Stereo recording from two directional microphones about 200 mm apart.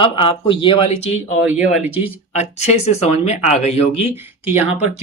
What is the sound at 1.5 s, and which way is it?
Speech, 5° right (ahead or behind).